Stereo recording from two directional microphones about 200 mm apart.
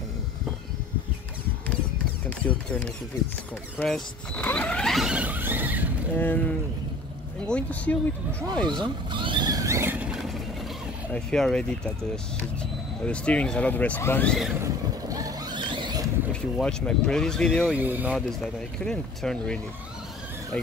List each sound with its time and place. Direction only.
2.2 s speech: 5° left (ahead or behind)
6.1 s speech: 10° left (ahead or behind)
8.6 s vehicle: 20° right (ahead or behind); by 10.3 s 5° right (ahead or behind)
11.1 s speech: 5° left (ahead or behind)
13.0 s speech: 5° left (ahead or behind)
14.5 s vehicle: 15° right (ahead or behind)
16.3 s speech: 5° left (ahead or behind)
17.7 s speech: 10° right (ahead or behind)
18.1 s speech: 5° left (ahead or behind)